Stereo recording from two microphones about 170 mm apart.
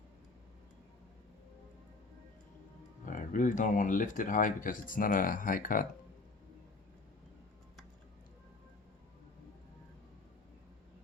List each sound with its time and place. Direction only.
3.1 s speech: 50° left (ahead or behind)